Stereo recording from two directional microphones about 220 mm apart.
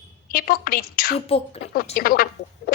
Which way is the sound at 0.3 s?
40° left (ahead or behind).